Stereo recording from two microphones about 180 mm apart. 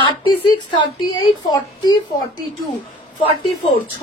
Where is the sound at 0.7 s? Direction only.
25° left (ahead or behind).